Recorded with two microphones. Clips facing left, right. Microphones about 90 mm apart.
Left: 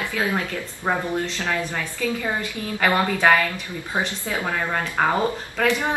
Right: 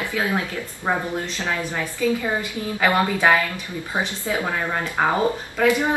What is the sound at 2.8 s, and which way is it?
A woman's voice, 10° right (ahead or behind).